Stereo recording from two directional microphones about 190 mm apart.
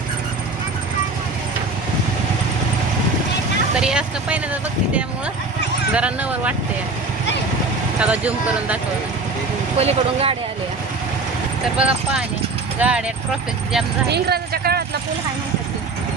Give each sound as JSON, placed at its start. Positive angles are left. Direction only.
{"t": 3.8, "sound": "speech", "side_deg": -5}
{"t": 5.9, "sound": "speech", "side_deg": -5}
{"t": 7.9, "sound": "speech", "side_deg": -5}
{"t": 9.7, "sound": "speech", "side_deg": -30}
{"t": 11.8, "sound": "speech", "side_deg": -5}
{"t": 14.1, "sound": "speech", "side_deg": -55}